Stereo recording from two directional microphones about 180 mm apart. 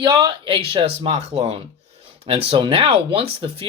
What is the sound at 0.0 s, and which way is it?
Speech, 25° right (ahead or behind).